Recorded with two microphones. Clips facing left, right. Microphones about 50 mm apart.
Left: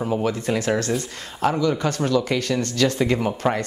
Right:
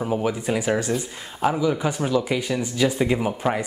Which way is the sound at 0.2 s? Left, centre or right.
Centre.